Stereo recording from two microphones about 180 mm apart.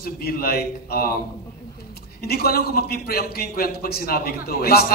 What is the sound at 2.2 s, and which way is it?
A man's voice, 60° left (ahead or behind).